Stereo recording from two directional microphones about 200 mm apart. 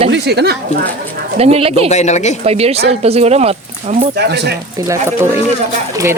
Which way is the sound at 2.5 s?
30° right (ahead or behind).